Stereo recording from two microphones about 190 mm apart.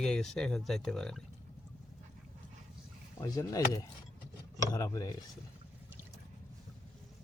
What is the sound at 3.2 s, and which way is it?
Speech, 20° left (ahead or behind).